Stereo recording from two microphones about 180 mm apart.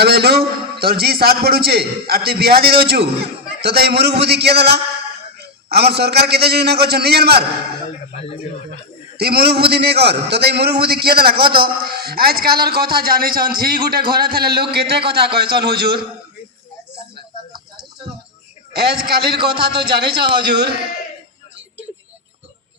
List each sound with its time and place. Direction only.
0.0 s a man's voice: 65° right (ahead or behind)
8.1 s speech: 35° left (ahead or behind)
9.1 s a man's voice: 60° right (ahead or behind)
18.8 s a man's voice: 60° right (ahead or behind)